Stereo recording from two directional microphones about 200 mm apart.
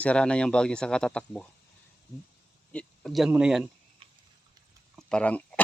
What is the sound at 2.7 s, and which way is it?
Speech, 5° left (ahead or behind).